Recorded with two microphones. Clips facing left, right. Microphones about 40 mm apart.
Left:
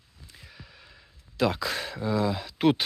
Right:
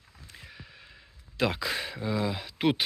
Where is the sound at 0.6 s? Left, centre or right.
Centre.